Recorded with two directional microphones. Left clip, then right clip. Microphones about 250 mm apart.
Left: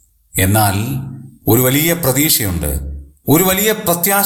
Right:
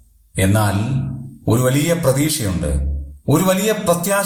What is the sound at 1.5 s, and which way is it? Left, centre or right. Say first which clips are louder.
A man's voice: left 3 dB; left.